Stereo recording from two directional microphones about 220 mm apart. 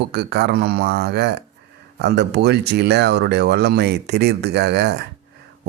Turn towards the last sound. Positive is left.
turn(degrees=-50)  # may be behind; listen again after turning